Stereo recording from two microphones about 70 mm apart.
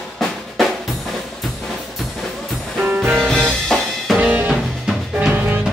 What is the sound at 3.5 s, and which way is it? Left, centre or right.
Music, centre.